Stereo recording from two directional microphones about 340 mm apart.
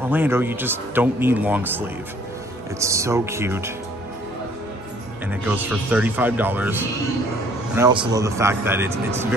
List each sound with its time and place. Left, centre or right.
0.0 s a man's voice: centre
5.3 s a man's voice: centre